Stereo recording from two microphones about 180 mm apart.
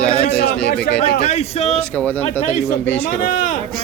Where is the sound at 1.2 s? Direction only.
35° left (ahead or behind).